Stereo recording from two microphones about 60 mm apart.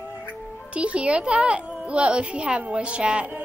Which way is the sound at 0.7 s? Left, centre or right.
Centre.